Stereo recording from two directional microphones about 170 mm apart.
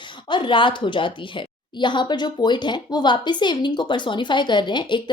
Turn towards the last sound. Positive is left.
turn(degrees=25)  # may be behind; listen again after turning